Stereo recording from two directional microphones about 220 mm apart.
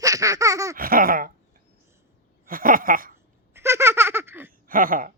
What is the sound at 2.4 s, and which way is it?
Speech, 40° right (ahead or behind).